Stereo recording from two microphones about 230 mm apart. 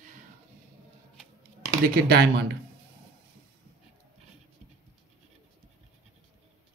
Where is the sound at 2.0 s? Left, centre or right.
Right.